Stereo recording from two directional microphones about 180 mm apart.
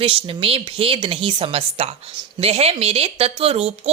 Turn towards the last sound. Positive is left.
turn(degrees=-35)  # may be behind; listen again after turning